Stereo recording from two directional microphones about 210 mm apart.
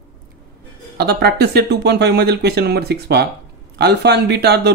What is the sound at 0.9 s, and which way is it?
Speech, 50° right (ahead or behind).